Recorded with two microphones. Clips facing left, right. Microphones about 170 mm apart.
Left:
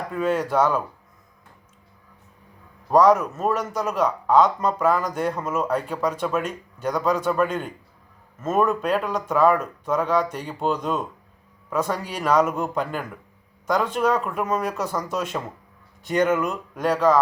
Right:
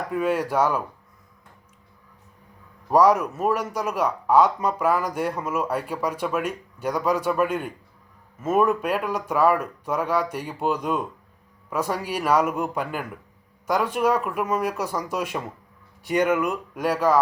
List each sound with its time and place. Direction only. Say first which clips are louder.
0.1 s a man's voice: left 1 dB; 10° right (ahead or behind)
2.9 s a man's voice: left 1 dB; 10° right (ahead or behind)